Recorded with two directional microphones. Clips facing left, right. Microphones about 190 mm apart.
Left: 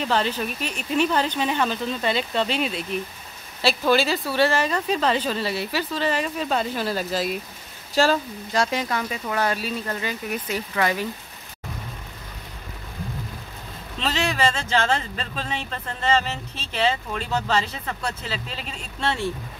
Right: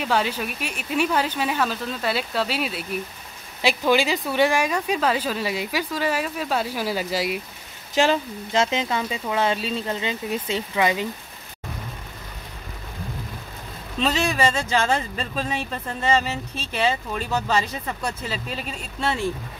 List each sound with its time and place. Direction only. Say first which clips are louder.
0.0 s speech: even; 10° right (ahead or behind)
13.9 s speech: right 3 dB; 10° right (ahead or behind)